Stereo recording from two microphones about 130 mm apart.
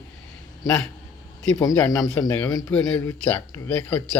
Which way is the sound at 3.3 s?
15° left (ahead or behind).